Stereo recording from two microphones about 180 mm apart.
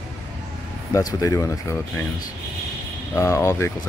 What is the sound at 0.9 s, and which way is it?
Speech, 20° left (ahead or behind).